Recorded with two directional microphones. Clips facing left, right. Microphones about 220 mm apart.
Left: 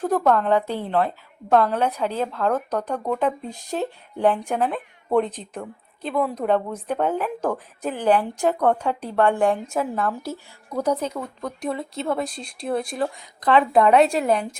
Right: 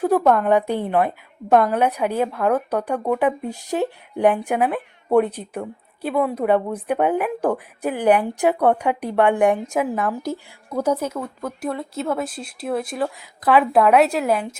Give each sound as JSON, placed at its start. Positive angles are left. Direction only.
{"t": 0.0, "sound": "a woman's voice", "side_deg": -10}